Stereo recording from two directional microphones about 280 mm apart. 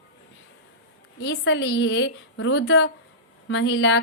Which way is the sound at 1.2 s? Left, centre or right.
Left.